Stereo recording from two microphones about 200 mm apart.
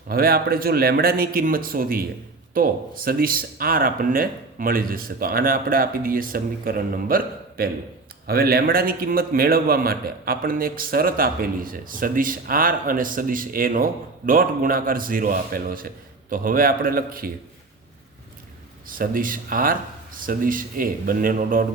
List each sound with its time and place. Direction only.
0.1 s a man's voice: 50° right (ahead or behind)
18.9 s a man's voice: 45° right (ahead or behind)